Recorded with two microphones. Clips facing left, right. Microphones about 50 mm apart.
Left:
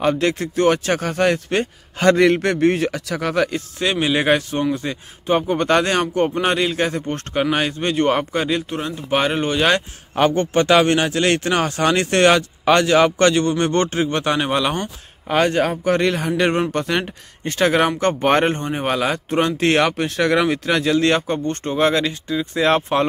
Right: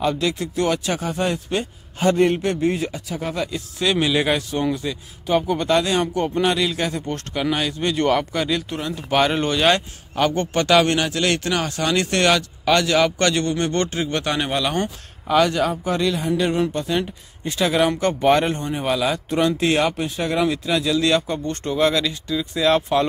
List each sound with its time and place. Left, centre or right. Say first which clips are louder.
0.0 s speech: left 3 dB; left
2.0 s a man's voice: left 3 dB; left
2.9 s a man's voice: left 5 dB; left
3.8 s speech: left 1 dB; left
5.7 s speech: left 2 dB; left
10.3 s speech: left 1 dB; centre
15.2 s speech: even; left